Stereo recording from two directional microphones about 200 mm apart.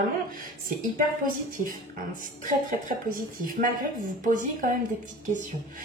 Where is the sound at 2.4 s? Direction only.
40° right (ahead or behind).